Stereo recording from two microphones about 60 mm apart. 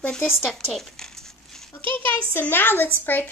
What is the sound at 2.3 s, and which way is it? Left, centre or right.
A woman's voice, left.